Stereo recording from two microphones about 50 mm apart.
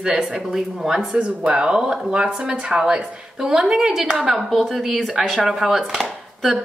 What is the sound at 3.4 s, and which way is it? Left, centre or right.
A woman's voice, centre.